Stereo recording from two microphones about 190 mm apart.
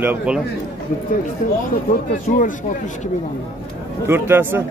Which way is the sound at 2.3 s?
45° left (ahead or behind).